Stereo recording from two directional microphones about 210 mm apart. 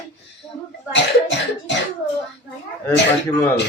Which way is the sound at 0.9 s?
60° left (ahead or behind).